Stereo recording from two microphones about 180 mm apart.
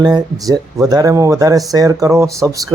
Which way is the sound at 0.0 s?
20° right (ahead or behind).